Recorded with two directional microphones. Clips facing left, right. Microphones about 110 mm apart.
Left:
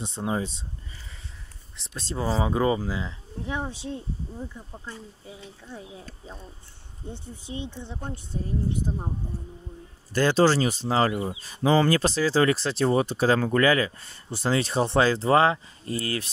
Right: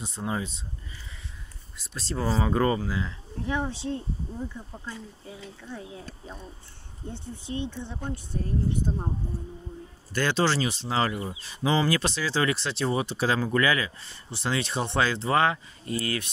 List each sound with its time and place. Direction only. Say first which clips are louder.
0.0 s speech: left 3 dB; 25° left (ahead or behind)
2.0 s speech: left 1 dB; 20° left (ahead or behind)
7.4 s speech: right 3 dB; 15° left (ahead or behind)
10.1 s speech: left 5 dB; 40° left (ahead or behind)